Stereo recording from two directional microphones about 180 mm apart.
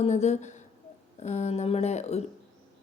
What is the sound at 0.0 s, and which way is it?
A woman's voice, 40° left (ahead or behind).